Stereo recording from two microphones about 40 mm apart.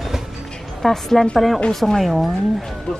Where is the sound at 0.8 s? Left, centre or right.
Centre.